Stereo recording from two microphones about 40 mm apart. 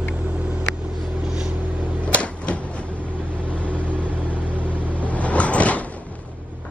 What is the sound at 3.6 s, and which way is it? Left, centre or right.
Vehicle, right.